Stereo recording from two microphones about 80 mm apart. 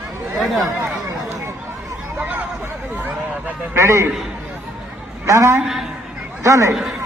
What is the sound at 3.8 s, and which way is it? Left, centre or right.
Speech, right.